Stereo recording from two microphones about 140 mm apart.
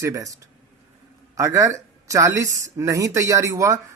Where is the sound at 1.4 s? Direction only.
20° right (ahead or behind).